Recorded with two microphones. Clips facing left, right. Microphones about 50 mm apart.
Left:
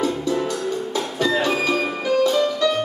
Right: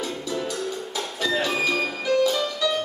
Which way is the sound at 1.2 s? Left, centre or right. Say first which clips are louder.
Left 3 dB; centre.